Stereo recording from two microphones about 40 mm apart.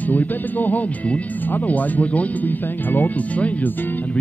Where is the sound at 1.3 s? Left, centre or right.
Left.